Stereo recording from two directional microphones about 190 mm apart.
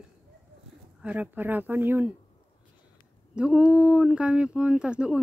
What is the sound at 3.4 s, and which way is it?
Speech, 5° right (ahead or behind).